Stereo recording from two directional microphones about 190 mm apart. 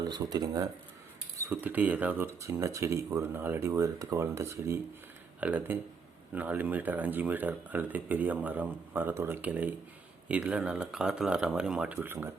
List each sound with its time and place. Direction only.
0.0 s speech: 20° right (ahead or behind)